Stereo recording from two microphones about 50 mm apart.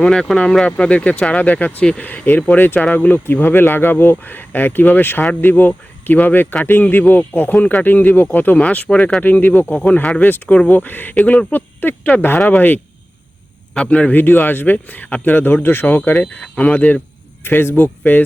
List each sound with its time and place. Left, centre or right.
0.0 s speech: centre; by 8.5 s left
8.5 s speech: left
10.2 s speech: left
11.2 s speech: left
11.8 s speech: left
13.7 s speech: left
14.2 s speech: left
16.1 s speech: left
17.4 s speech: left